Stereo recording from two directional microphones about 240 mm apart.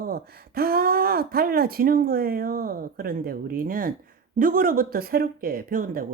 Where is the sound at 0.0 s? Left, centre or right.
Right.